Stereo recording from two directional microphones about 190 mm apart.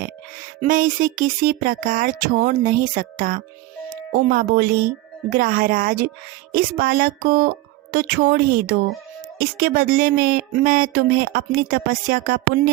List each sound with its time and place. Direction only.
0.6 s speech: 45° right (ahead or behind)